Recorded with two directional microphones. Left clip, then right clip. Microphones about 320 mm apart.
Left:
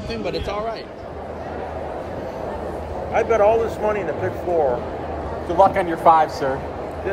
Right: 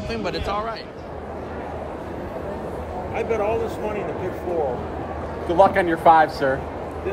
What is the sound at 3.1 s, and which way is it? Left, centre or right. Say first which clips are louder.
Speech: left 7 dB; centre.